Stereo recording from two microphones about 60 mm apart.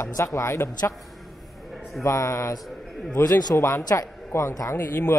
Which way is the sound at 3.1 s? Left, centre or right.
Left.